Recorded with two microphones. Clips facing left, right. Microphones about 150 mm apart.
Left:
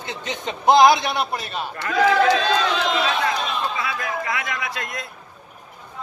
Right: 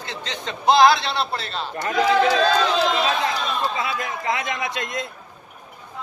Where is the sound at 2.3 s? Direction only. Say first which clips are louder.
Right 1 dB; 35° right (ahead or behind).